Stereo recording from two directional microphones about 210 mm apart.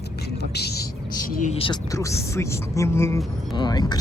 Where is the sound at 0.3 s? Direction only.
50° left (ahead or behind).